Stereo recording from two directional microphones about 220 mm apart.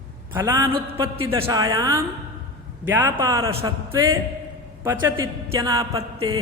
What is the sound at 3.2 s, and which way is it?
A woman's voice, 15° right (ahead or behind).